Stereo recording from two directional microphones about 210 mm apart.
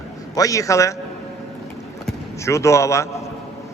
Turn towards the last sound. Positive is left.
turn(degrees=15)  # may be behind; listen again after turning